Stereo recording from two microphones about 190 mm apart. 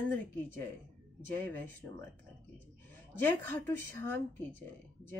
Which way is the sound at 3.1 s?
10° left (ahead or behind).